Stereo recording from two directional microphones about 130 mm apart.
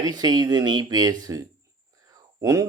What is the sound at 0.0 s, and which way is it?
Speech, 30° right (ahead or behind).